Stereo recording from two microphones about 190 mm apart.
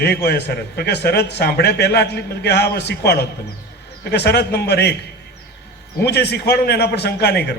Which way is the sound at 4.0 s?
60° left (ahead or behind).